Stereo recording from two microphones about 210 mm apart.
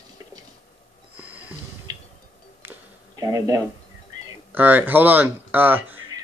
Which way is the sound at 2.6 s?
15° right (ahead or behind).